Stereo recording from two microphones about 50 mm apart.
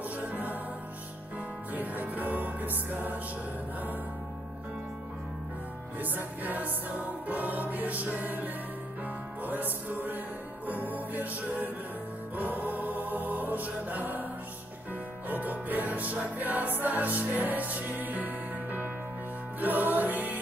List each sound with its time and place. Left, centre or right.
0.3 s music: right
1.7 s music: right
5.9 s music: right
12.4 s choir: right
15.2 s music: right